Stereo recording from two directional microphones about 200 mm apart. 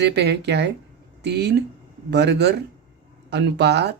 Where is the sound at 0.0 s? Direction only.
55° right (ahead or behind).